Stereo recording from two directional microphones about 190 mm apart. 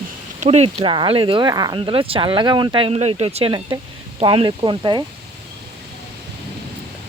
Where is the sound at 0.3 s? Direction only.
35° right (ahead or behind).